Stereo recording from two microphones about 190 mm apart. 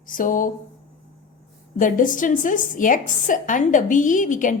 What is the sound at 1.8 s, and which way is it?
A woman's voice, 45° left (ahead or behind).